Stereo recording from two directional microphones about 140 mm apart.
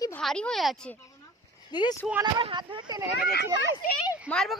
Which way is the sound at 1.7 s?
30° left (ahead or behind).